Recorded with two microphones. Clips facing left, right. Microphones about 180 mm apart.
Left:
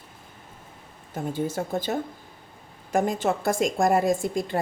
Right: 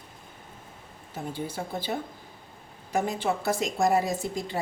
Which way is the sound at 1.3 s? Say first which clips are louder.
Left 7 dB; 45° left (ahead or behind).